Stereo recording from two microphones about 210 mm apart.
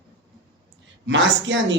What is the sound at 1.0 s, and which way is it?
Speech, 60° right (ahead or behind).